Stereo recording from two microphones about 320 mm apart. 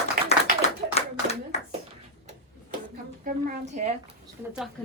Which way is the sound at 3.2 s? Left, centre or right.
Right.